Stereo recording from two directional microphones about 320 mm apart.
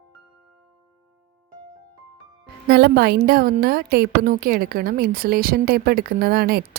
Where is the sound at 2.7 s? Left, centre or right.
Right.